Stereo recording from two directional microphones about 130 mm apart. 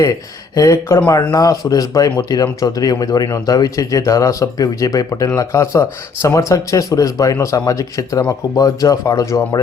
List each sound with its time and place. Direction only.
0.0 s speech: 25° left (ahead or behind)